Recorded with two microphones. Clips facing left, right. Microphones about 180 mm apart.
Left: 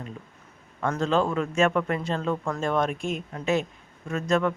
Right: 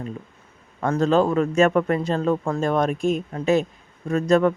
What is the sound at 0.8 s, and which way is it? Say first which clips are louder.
A man's voice: right 5 dB; 40° right (ahead or behind).